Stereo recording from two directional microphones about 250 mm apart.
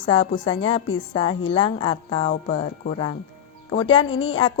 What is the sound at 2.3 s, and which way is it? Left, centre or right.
Speech, left.